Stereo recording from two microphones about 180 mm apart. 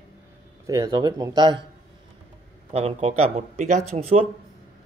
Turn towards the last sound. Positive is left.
turn(degrees=-35)  # may be behind; listen again after turning